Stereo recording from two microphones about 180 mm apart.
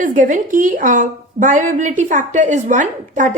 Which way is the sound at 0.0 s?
45° right (ahead or behind).